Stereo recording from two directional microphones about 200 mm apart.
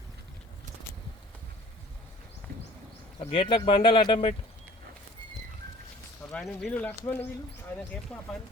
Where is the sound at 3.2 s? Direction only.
25° left (ahead or behind).